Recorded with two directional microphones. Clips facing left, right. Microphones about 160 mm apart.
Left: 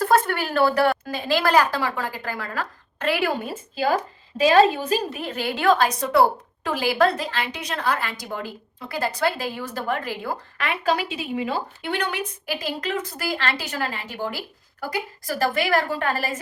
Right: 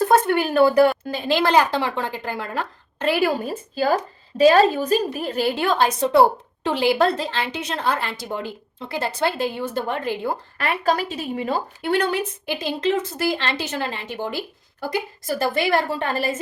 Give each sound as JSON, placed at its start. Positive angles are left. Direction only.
{"t": 0.0, "sound": "a woman's voice", "side_deg": -20}
{"t": 3.4, "sound": "a woman's voice", "side_deg": -40}
{"t": 12.5, "sound": "a woman's voice", "side_deg": -25}